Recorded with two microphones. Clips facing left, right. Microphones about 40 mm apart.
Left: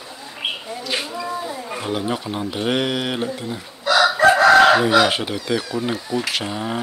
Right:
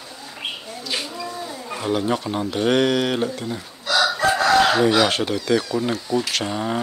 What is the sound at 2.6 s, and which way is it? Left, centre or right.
Speech, centre.